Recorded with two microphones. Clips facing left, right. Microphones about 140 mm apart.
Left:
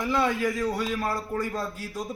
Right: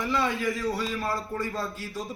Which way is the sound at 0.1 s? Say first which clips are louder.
Left 3 dB; 45° left (ahead or behind).